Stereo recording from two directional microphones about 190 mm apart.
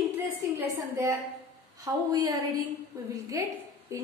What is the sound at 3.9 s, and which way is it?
Speech, 15° right (ahead or behind).